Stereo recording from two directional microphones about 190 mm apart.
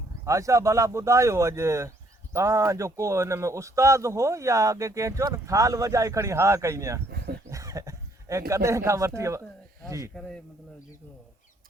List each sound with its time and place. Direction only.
0.3 s speech: 15° right (ahead or behind)
7.1 s a sound: 55° right (ahead or behind)
7.5 s speech: 15° right (ahead or behind)
10.2 s a man's voice: 5° left (ahead or behind)